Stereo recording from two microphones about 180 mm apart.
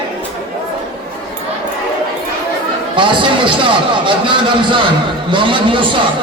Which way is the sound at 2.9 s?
25° right (ahead or behind).